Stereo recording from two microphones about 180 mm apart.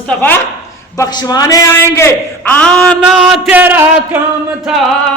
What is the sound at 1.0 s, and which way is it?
A man's voice, 20° left (ahead or behind).